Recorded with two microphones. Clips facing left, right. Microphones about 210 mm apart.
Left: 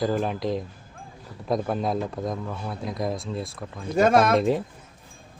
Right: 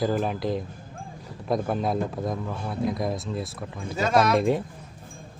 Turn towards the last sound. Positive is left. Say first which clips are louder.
# even
turn(degrees=0)  # may be behind; listen again after turning